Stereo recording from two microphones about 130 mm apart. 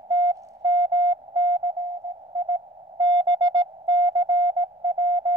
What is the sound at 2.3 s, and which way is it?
Music, 35° right (ahead or behind).